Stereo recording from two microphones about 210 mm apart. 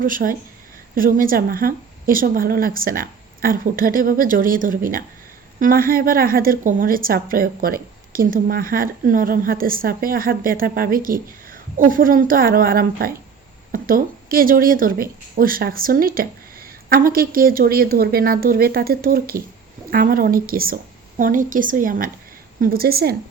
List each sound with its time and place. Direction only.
0.0 s a woman's voice: 40° right (ahead or behind)